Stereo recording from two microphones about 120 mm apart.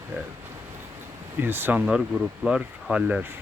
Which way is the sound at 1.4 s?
15° right (ahead or behind).